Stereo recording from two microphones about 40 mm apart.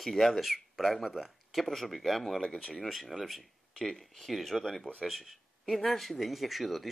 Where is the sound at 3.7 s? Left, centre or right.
Centre.